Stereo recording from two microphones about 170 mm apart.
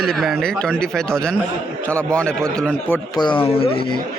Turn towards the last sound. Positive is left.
turn(degrees=30)  # may be behind; listen again after turning